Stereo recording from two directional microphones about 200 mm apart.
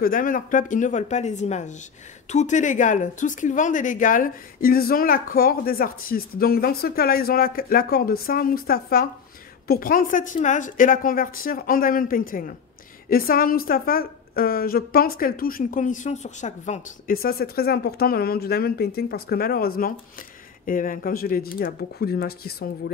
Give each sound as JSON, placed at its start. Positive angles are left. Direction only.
{"t": 0.0, "sound": "speech", "side_deg": 45}